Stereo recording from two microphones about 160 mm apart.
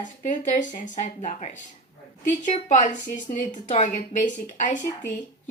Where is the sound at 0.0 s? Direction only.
50° left (ahead or behind).